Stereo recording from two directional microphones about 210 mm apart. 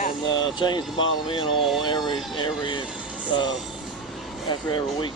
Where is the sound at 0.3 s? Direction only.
20° left (ahead or behind).